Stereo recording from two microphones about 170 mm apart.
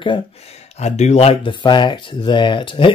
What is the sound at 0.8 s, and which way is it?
Speech, 40° left (ahead or behind).